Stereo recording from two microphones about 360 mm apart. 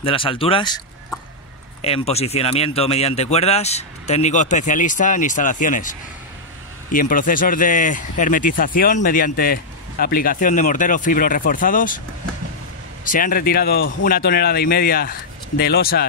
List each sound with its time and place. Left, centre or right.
0.0 s speech: centre
1.8 s speech: centre
13.0 s speech: left